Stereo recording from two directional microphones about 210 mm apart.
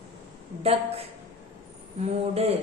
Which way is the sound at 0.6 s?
30° right (ahead or behind).